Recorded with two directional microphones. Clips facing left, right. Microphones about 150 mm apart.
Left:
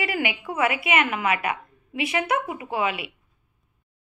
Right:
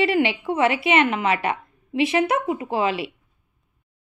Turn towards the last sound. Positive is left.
turn(degrees=-30)  # may be behind; listen again after turning